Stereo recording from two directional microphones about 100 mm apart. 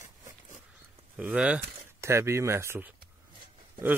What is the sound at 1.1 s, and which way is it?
Speech, 10° right (ahead or behind).